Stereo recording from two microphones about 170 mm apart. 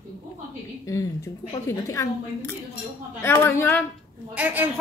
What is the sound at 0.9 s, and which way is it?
A woman's voice, 20° left (ahead or behind).